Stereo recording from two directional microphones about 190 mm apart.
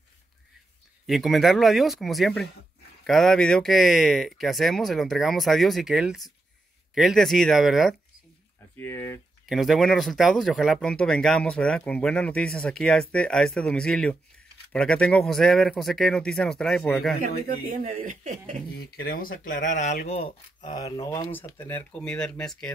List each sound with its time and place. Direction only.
1.0 s speech: centre (ahead or behind)
8.7 s speech: 10° left (ahead or behind)
9.5 s speech: centre (ahead or behind)
17.6 s speech: 45° right (ahead or behind)
18.8 s speech: 55° left (ahead or behind); by 20.7 s 30° left (ahead or behind)
20.7 s speech: 20° left (ahead or behind); by 22.7 s 5° left (ahead or behind)